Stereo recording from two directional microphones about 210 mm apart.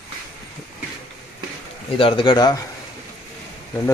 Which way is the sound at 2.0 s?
25° left (ahead or behind).